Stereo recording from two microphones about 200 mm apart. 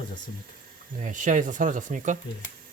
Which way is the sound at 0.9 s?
40° right (ahead or behind).